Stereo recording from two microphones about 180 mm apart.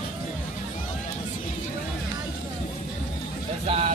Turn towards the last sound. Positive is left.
turn(degrees=-35)  # may be behind; listen again after turning